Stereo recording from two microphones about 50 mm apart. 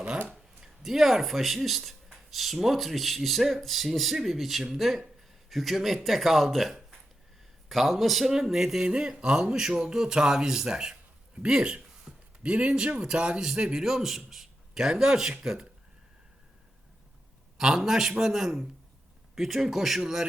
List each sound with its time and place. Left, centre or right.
0.6 s speech: centre
12.1 s a sound: centre
12.4 s speech: right
17.6 s speech: centre